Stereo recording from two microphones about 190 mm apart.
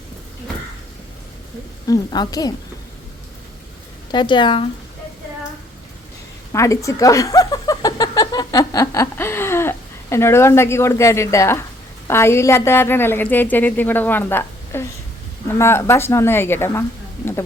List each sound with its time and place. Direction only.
1.9 s a woman's voice: 20° left (ahead or behind)
4.1 s a woman's voice: 25° left (ahead or behind)
6.5 s a woman's voice: 15° left (ahead or behind)